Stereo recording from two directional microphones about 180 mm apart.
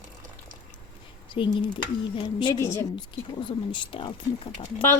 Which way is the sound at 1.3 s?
25° left (ahead or behind).